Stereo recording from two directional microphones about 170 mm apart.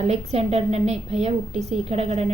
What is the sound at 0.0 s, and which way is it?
A woman's voice, 40° right (ahead or behind).